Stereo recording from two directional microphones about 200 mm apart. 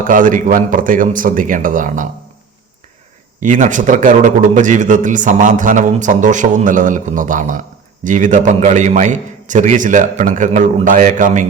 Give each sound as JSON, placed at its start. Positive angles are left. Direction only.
{"t": 0.0, "sound": "a man's voice", "side_deg": -40}
{"t": 3.4, "sound": "a man's voice", "side_deg": -40}